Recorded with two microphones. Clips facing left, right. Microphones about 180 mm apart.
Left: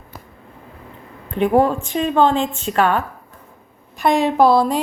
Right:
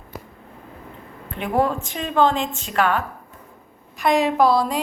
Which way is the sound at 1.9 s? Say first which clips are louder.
Left 9 dB; 35° left (ahead or behind).